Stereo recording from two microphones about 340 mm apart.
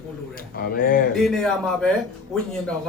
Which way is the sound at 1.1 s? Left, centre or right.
Centre.